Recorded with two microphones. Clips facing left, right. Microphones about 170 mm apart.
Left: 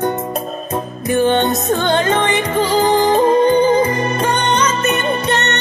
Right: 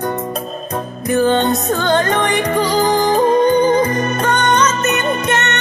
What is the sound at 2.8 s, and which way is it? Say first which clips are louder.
Music: left 2 dB; 25° left (ahead or behind).